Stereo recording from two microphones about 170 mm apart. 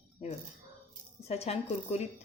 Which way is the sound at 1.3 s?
40° left (ahead or behind).